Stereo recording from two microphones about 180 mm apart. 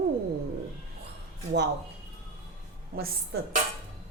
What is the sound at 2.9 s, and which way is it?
Speech, 55° right (ahead or behind).